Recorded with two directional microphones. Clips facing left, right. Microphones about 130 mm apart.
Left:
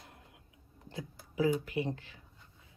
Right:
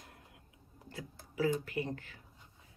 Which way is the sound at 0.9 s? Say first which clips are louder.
Left 3 dB; 20° left (ahead or behind).